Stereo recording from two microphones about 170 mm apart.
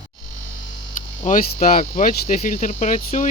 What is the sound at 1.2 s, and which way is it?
Speech, 45° left (ahead or behind).